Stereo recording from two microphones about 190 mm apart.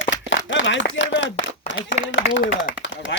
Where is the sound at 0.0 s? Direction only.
75° left (ahead or behind).